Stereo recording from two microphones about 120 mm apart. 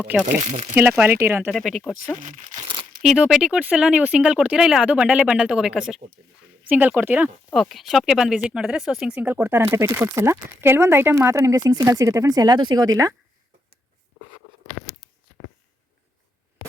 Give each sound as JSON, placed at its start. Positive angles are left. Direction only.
{"t": 0.0, "sound": "speech", "side_deg": -10}
{"t": 0.4, "sound": "speech", "side_deg": -80}
{"t": 0.8, "sound": "speech", "side_deg": -15}
{"t": 1.5, "sound": "speech", "side_deg": -5}
{"t": 2.1, "sound": "speech", "side_deg": -90}
{"t": 2.6, "sound": "crumpling", "side_deg": -45}
{"t": 3.0, "sound": "speech", "side_deg": -5}
{"t": 7.5, "sound": "speech", "side_deg": 0}